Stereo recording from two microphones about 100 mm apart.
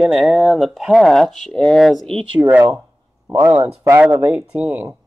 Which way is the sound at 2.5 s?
20° right (ahead or behind).